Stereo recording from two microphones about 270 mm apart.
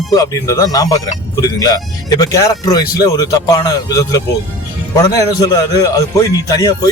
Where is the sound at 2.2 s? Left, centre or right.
Centre.